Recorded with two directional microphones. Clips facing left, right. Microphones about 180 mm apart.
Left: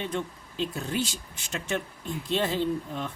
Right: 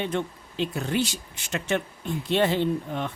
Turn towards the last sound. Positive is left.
turn(degrees=-65)  # may be behind; listen again after turning